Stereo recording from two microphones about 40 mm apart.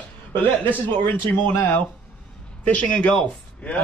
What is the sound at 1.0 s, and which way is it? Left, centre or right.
Speech, left.